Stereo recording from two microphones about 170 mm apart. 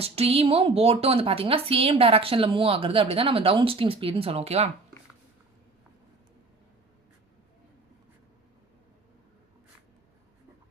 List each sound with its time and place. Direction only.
0.0 s a woman's voice: 35° right (ahead or behind)